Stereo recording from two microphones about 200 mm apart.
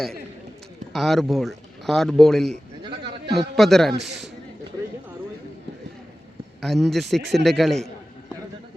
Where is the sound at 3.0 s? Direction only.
25° right (ahead or behind).